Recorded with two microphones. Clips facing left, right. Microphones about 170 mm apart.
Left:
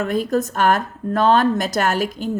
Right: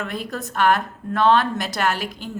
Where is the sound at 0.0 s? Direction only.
45° left (ahead or behind).